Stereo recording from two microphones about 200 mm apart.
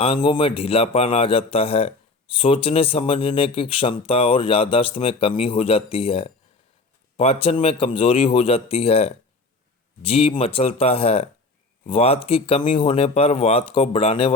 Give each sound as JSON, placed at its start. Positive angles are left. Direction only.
{"t": 0.0, "sound": "a man's voice", "side_deg": 25}